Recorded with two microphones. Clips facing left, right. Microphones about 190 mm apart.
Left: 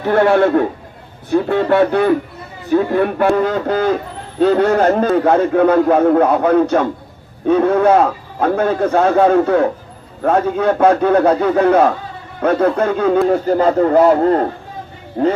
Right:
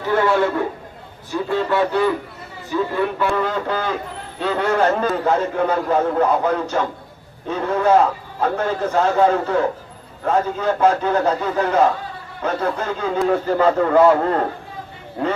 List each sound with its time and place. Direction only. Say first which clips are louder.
0.1 s a man's voice: left 6 dB; 60° left (ahead or behind)
13.2 s a man's voice: left 3 dB; 35° left (ahead or behind)